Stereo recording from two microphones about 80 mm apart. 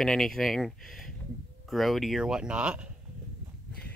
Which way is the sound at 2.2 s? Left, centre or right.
Centre.